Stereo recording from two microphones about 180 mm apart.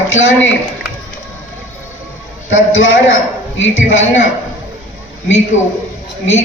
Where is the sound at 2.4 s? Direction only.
90° left.